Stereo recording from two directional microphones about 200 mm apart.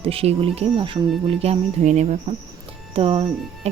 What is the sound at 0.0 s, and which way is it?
Speech, 30° right (ahead or behind).